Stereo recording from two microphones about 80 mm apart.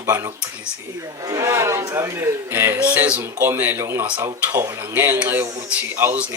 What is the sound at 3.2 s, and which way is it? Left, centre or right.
A man's voice, right.